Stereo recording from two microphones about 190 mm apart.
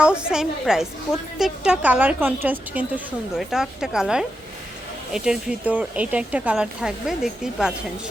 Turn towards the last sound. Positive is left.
turn(degrees=-5)  # may be behind; listen again after turning